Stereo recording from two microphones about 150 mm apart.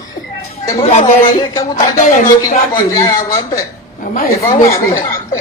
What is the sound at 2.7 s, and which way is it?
Speech, 20° left (ahead or behind).